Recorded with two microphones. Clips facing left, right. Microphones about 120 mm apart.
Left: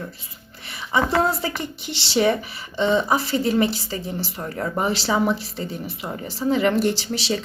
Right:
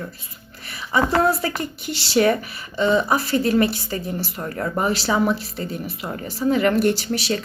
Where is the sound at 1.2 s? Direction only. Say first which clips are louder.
Right 3 dB; 25° left (ahead or behind).